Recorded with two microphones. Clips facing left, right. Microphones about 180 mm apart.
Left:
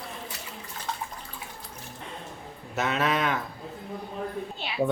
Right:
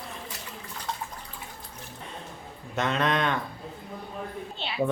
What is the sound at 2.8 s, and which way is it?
Speech, 5° left (ahead or behind).